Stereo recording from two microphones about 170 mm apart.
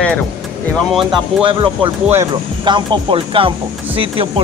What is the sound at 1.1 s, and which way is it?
Speech, 30° right (ahead or behind).